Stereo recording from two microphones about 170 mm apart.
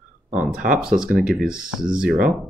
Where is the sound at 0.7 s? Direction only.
5° right (ahead or behind).